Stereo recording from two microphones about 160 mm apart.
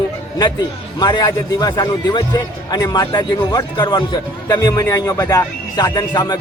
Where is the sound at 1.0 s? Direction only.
25° left (ahead or behind).